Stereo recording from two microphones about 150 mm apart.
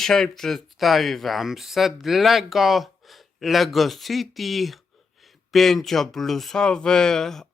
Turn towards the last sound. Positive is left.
turn(degrees=5)  # may be behind; listen again after turning